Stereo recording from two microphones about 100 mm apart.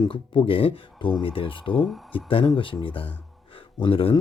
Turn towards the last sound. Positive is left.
turn(degrees=60)  # may be behind; listen again after turning